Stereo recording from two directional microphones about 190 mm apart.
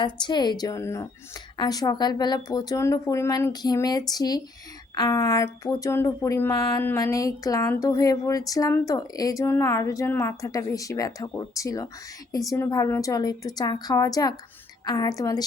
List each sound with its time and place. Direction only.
0.0 s speech: 25° left (ahead or behind)